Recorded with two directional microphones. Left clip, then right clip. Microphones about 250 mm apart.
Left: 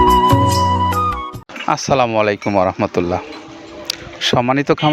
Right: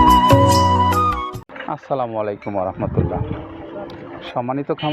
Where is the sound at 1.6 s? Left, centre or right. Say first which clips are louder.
Left 8 dB; left.